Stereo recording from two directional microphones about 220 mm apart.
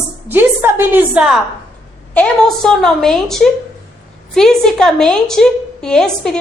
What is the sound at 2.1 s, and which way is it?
A woman's voice, 5° left (ahead or behind).